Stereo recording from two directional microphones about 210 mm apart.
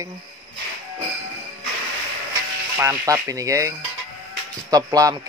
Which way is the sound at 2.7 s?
15° right (ahead or behind).